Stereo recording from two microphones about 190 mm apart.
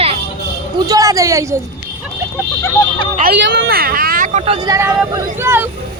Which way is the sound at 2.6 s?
25° left (ahead or behind).